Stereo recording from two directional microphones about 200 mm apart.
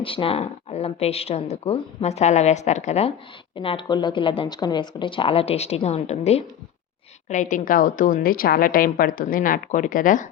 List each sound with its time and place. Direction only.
0.0 s a woman's voice: 25° left (ahead or behind)